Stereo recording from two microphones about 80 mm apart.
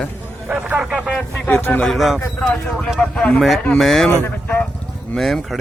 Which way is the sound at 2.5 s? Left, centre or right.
Centre.